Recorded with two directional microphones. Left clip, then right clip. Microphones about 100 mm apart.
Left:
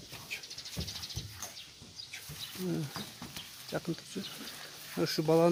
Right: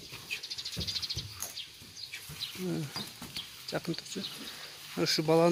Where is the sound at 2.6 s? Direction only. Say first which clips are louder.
Left 2 dB; centre (ahead or behind).